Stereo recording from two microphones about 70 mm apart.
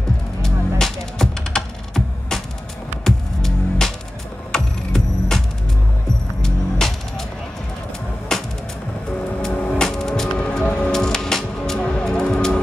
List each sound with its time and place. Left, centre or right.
0.4 s computer keyboard: centre
3.0 s music: centre
6.4 s music: centre
8.3 s music: centre
9.5 s a sound: left
9.8 s music: centre